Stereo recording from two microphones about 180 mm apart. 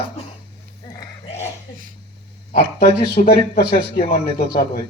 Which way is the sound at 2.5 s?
55° left (ahead or behind).